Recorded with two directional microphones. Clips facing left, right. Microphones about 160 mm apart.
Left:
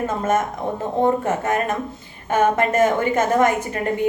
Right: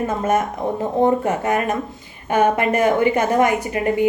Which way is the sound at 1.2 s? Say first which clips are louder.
Right 1 dB; 15° right (ahead or behind).